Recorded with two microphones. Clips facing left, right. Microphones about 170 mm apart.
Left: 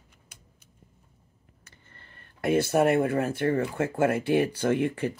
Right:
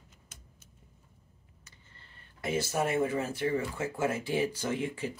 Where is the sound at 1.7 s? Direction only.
60° left (ahead or behind).